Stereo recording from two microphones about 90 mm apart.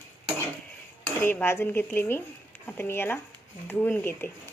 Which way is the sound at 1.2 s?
20° left (ahead or behind).